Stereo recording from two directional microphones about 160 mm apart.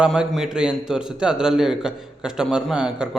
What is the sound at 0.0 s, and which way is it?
A man's voice, 5° right (ahead or behind).